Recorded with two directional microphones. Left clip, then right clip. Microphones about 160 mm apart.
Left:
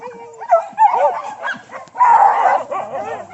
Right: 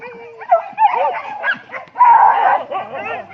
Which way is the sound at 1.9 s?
35° left (ahead or behind).